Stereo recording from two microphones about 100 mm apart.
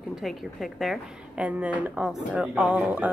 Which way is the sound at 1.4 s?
10° right (ahead or behind).